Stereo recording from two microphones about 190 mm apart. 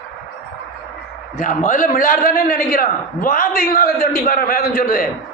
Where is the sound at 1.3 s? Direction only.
45° left (ahead or behind).